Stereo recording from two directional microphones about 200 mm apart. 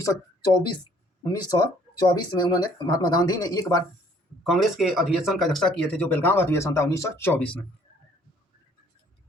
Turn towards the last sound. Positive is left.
turn(degrees=10)  # may be behind; listen again after turning